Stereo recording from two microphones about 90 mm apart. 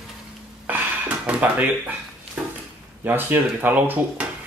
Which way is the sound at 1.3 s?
15° right (ahead or behind).